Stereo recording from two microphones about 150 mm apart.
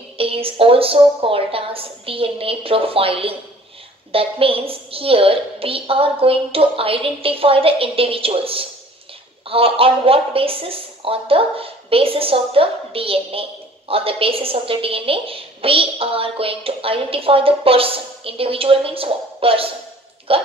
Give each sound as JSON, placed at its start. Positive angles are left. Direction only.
{"t": 0.2, "sound": "a woman's voice", "side_deg": -40}